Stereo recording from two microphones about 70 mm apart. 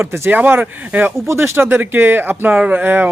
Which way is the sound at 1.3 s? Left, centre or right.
Right.